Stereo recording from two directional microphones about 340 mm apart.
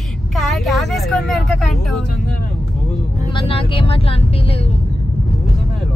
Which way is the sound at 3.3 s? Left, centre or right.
Centre.